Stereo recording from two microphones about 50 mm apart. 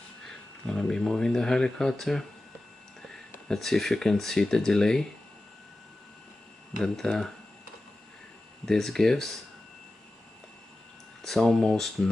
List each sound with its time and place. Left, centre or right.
0.2 s speech: centre
3.5 s speech: centre
6.8 s speech: centre
8.6 s speech: centre
11.2 s speech: centre